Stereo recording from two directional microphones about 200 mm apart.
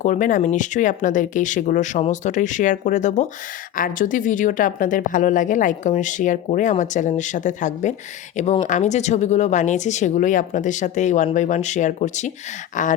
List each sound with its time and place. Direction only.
0.0 s speech: 40° left (ahead or behind)